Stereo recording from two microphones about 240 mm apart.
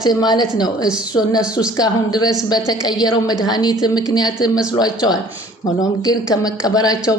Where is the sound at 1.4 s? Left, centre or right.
Centre.